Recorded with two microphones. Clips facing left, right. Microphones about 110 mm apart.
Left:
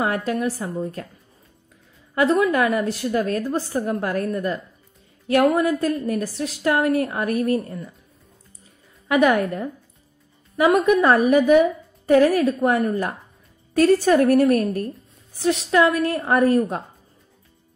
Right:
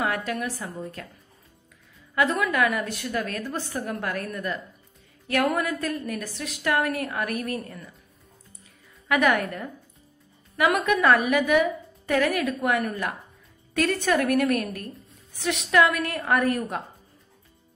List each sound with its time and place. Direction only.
0.0 s a woman's voice: 30° left (ahead or behind)
2.1 s a woman's voice: 30° left (ahead or behind)
9.0 s a woman's voice: 25° left (ahead or behind)